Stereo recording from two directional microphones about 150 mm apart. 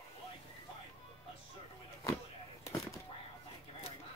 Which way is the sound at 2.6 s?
20° left (ahead or behind).